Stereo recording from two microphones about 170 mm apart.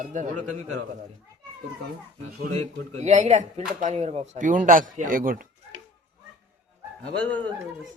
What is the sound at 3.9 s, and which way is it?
Speech, 35° right (ahead or behind).